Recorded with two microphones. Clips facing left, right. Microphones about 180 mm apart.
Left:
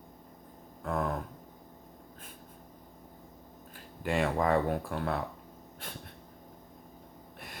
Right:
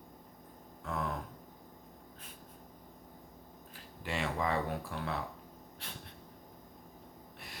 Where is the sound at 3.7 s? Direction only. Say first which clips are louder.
Left 8 dB; 50° left (ahead or behind).